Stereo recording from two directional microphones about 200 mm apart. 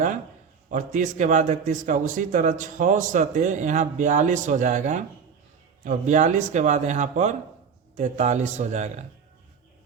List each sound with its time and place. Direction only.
0.7 s a man's voice: 40° right (ahead or behind)